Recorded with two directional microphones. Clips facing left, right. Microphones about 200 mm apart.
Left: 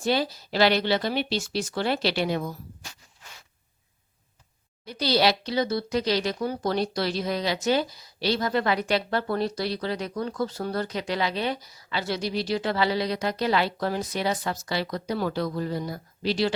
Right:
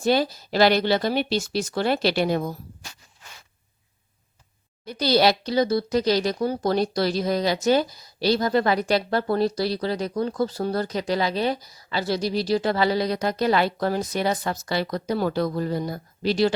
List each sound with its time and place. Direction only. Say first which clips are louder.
0.0 s speech: right 4 dB; 45° right (ahead or behind)
4.9 s speech: right 3 dB; 45° right (ahead or behind)